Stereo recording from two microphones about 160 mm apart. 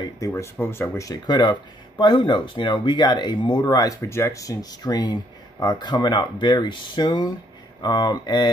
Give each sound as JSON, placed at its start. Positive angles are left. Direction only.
{"t": 0.0, "sound": "speech", "side_deg": 20}